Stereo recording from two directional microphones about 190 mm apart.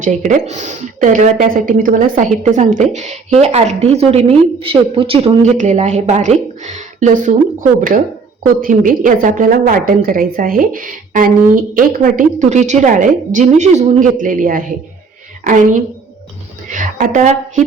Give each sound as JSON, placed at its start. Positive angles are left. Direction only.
{"t": 0.0, "sound": "a woman's voice", "side_deg": -40}